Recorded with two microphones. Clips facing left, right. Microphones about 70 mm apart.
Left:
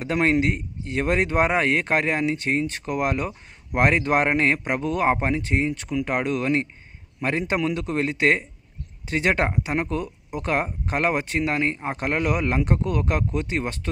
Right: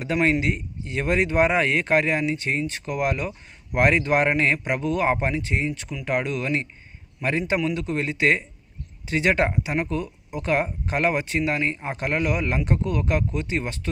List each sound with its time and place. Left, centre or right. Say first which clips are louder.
0.0 s speech: left 1 dB; left